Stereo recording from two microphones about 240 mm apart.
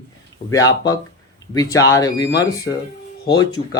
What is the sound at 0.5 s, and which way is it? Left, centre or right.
Speech, centre.